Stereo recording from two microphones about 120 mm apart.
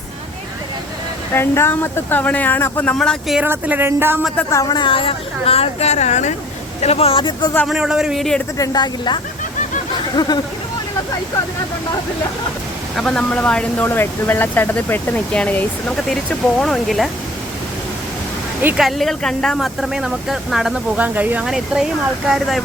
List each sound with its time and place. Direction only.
1.3 s speech: 20° left (ahead or behind)
2.9 s speech: 5° left (ahead or behind)
3.4 s speech: 15° right (ahead or behind)
4.5 s a woman's voice: 40° left (ahead or behind); by 6.3 s 75° left (ahead or behind)
6.8 s speech: 60° left (ahead or behind)
7.7 s speech: 5° right (ahead or behind)
8.5 s speech: 30° left (ahead or behind)
13.0 s speech: 5° left (ahead or behind)
18.8 s speech: centre (ahead or behind)